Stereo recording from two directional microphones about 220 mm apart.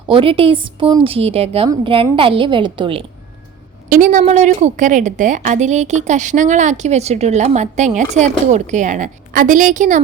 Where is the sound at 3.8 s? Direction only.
35° right (ahead or behind).